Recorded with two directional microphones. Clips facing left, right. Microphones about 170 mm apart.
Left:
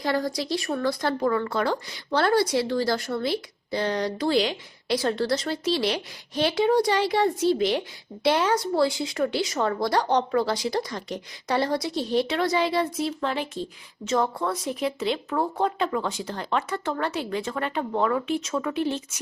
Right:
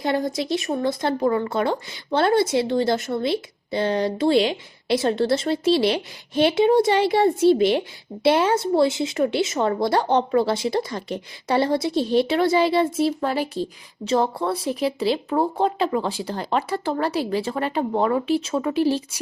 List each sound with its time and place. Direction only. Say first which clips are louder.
0.0 s speech: right 3 dB; 25° right (ahead or behind)